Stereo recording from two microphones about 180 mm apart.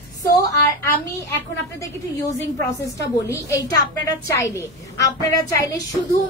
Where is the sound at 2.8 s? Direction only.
15° left (ahead or behind).